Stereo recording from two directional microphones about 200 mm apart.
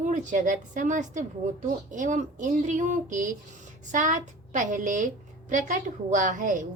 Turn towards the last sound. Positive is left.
turn(degrees=-40)  # may be behind; listen again after turning